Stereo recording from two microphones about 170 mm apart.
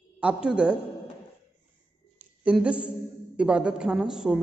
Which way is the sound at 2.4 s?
5° right (ahead or behind).